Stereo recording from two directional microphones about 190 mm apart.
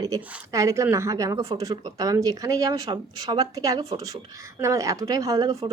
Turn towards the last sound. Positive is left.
turn(degrees=-20)  # may be behind; listen again after turning